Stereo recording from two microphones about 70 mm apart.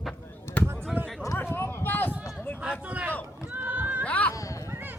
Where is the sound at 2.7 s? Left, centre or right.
Centre.